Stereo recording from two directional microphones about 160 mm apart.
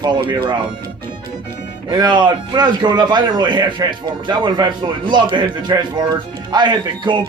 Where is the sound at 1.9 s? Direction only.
25° right (ahead or behind).